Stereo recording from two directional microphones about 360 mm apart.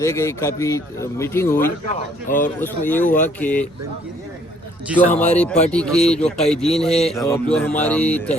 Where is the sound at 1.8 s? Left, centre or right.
Left.